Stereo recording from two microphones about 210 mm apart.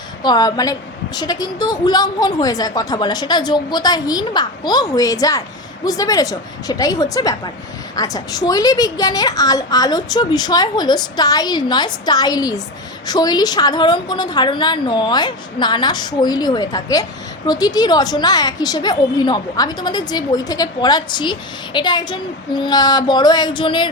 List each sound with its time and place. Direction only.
0.2 s a woman's voice: 20° left (ahead or behind)